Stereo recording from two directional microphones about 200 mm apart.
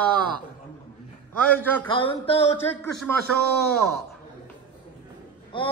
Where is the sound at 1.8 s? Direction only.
25° left (ahead or behind).